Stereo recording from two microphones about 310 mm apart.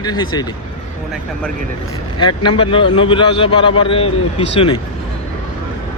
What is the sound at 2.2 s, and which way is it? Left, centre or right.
A man's voice, centre.